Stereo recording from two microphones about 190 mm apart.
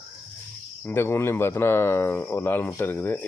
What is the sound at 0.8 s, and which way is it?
Speech, 10° left (ahead or behind).